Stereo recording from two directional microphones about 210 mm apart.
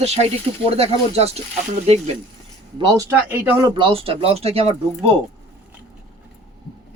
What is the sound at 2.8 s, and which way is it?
Speech, 15° right (ahead or behind).